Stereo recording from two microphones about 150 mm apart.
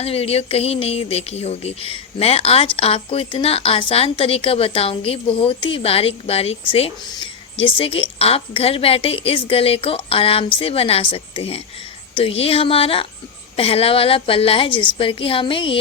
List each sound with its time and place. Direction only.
0.0 s a woman's voice: 40° left (ahead or behind)